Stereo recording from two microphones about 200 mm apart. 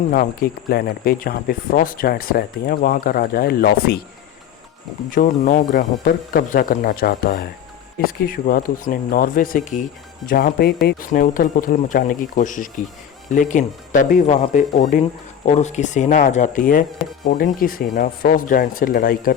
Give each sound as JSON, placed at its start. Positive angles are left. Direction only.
{"t": 0.1, "sound": "speech", "side_deg": 45}
{"t": 5.1, "sound": "speech", "side_deg": 40}